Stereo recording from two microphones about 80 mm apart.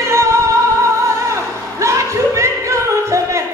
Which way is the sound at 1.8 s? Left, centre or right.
Right.